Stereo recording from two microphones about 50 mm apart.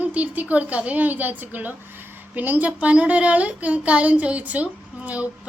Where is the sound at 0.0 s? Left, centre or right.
Right.